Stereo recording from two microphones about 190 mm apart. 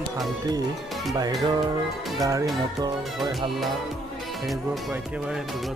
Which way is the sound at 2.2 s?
15° right (ahead or behind).